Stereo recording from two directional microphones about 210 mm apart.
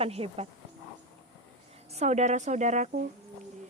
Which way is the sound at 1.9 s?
30° right (ahead or behind).